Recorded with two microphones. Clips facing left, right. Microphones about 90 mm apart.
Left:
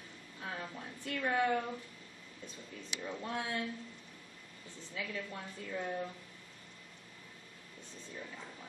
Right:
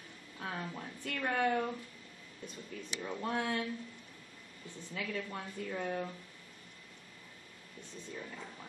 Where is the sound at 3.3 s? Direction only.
55° right (ahead or behind).